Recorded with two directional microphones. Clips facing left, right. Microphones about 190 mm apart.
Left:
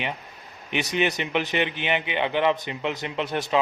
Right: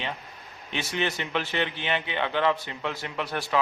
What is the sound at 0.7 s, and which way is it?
A man's voice, 15° left (ahead or behind).